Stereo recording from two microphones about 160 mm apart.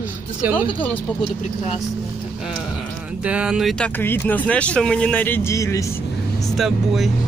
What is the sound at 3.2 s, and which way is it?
Speech, 5° right (ahead or behind).